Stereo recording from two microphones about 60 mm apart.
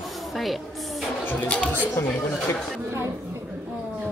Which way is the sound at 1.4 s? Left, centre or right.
Centre.